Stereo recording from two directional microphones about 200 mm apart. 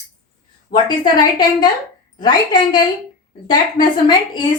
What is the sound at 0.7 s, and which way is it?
A woman's voice, 20° left (ahead or behind).